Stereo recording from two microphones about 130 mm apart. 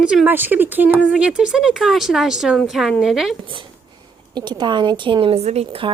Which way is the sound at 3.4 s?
40° right (ahead or behind).